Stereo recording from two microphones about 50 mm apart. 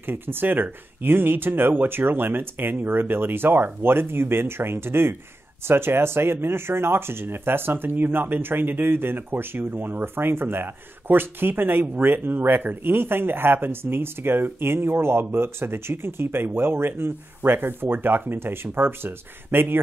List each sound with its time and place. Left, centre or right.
0.0 s speech: right